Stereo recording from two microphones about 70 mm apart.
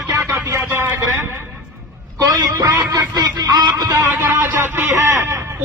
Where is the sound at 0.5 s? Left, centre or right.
Right.